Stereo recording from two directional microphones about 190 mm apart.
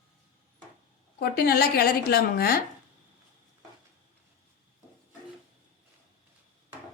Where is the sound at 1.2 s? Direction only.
55° left (ahead or behind).